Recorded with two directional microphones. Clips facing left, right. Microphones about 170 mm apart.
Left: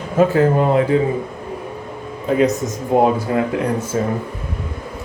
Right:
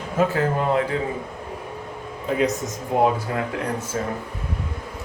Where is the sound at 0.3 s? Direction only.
15° left (ahead or behind).